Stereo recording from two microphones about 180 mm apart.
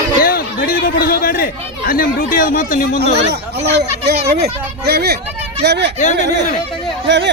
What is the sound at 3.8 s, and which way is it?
A child's voice, 65° right (ahead or behind).